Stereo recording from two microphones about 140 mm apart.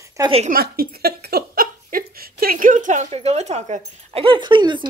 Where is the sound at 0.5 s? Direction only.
90° right; by 3.1 s 60° right (ahead or behind).